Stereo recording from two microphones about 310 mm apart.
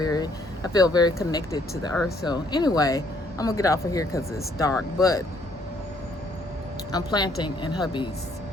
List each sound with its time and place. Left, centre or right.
0.0 s speech: centre
6.9 s speech: centre